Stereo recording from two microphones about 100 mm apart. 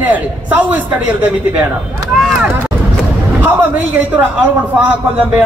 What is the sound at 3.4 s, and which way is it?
Speech, 20° right (ahead or behind).